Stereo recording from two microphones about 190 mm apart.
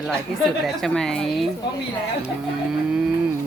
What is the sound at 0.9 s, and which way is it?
Speech, centre (ahead or behind).